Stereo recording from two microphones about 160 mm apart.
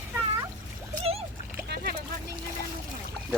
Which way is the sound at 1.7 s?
70° right (ahead or behind).